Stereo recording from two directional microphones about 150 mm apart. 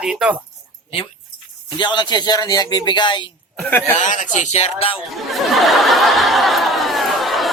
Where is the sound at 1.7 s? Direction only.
30° left (ahead or behind).